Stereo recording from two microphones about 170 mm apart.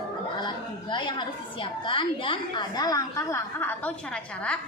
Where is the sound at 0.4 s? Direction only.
30° left (ahead or behind).